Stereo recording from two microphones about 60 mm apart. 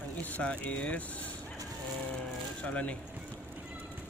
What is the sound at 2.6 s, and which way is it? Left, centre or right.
Speech, left.